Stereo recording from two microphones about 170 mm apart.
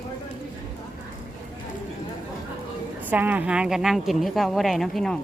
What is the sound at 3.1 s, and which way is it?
A woman's voice, 10° right (ahead or behind).